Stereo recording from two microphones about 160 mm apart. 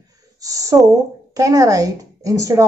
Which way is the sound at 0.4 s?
20° right (ahead or behind).